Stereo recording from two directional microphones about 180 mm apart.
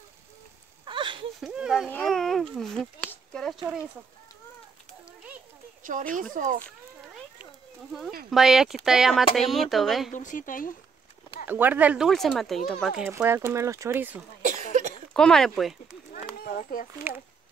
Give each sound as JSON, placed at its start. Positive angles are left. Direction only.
{"t": 0.8, "sound": "a sound", "side_deg": -25}
{"t": 1.4, "sound": "a sound", "side_deg": -5}
{"t": 1.9, "sound": "speech", "side_deg": 5}
{"t": 5.8, "sound": "speech", "side_deg": -50}
{"t": 7.9, "sound": "speech", "side_deg": 0}
{"t": 10.1, "sound": "speech", "side_deg": 45}
{"t": 11.4, "sound": "speech", "side_deg": -10}
{"t": 13.1, "sound": "speech", "side_deg": -15}
{"t": 14.4, "sound": "cough", "side_deg": -45}
{"t": 15.1, "sound": "speech", "side_deg": 5}
{"t": 16.1, "sound": "a sound", "side_deg": 55}